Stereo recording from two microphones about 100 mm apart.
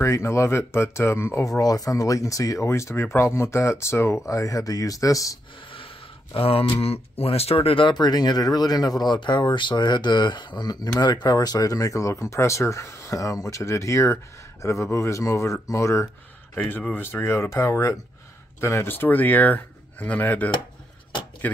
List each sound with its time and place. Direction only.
0.0 s speech: 30° left (ahead or behind)
6.3 s speech: 70° left (ahead or behind); by 16.1 s 30° left (ahead or behind)
16.5 s speech: 20° left (ahead or behind)